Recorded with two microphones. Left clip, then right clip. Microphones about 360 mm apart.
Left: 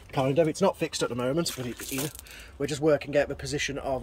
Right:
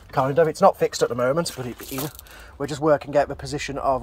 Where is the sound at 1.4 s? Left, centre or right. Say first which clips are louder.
Right 4 dB; centre.